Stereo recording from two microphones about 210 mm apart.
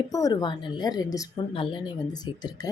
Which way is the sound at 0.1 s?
15° left (ahead or behind).